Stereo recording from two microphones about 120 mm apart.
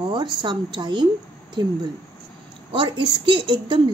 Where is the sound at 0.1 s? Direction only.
40° right (ahead or behind).